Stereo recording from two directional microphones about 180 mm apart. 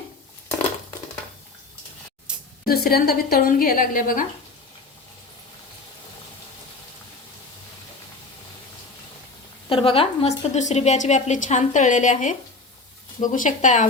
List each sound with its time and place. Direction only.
2.3 s a sound: 5° right (ahead or behind)
2.6 s a woman's voice: 60° left (ahead or behind)
9.6 s a woman's voice: 30° left (ahead or behind)